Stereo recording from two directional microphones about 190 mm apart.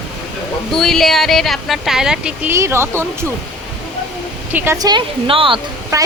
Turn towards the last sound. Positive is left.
turn(degrees=-15)  # may be behind; listen again after turning